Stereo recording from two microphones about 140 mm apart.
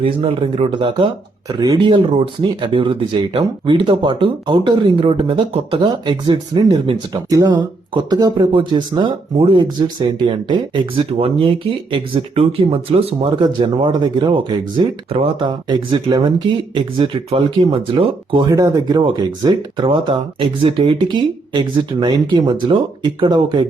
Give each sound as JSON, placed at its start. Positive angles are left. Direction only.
{"t": 0.0, "sound": "speech", "side_deg": -45}
{"t": 13.4, "sound": "speech", "side_deg": -35}